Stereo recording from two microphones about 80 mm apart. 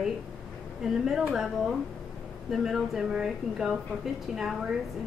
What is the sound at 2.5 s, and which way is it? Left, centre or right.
A woman's voice, centre.